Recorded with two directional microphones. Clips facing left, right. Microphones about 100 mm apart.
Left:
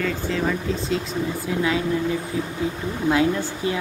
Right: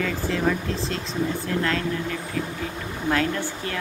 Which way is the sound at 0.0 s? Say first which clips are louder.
Even; centre (ahead or behind).